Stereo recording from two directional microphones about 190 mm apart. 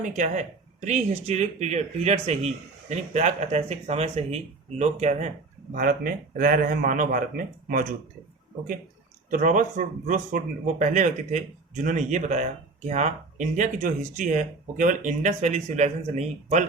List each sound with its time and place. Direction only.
0.0 s speech: 40° right (ahead or behind)
9.3 s speech: 45° right (ahead or behind)